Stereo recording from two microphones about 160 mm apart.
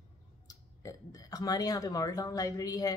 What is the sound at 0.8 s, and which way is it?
Speech, 20° left (ahead or behind).